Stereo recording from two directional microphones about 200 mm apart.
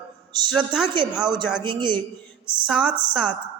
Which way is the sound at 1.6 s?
20° right (ahead or behind).